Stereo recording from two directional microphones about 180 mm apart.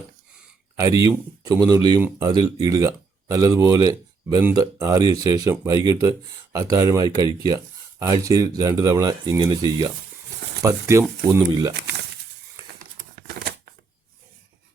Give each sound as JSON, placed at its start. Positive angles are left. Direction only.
{"t": 0.8, "sound": "speech", "side_deg": -20}
{"t": 11.7, "sound": "speech", "side_deg": -65}
{"t": 13.1, "sound": "tearing", "side_deg": -55}